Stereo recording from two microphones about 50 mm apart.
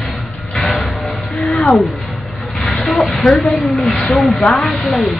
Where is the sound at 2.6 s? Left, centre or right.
Left.